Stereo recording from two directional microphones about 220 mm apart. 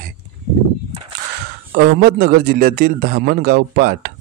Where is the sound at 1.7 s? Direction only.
45° right (ahead or behind).